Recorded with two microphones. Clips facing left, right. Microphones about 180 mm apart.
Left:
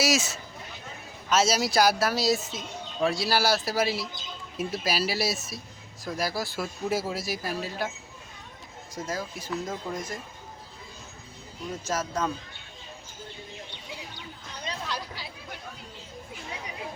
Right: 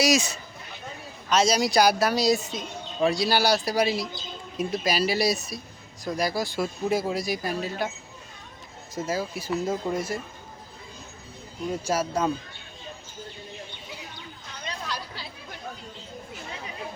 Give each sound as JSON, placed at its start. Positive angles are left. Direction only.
{"t": 0.0, "sound": "speech", "side_deg": 5}
{"t": 9.0, "sound": "speech", "side_deg": -5}
{"t": 11.7, "sound": "speech", "side_deg": -10}
{"t": 14.8, "sound": "a sound", "side_deg": 10}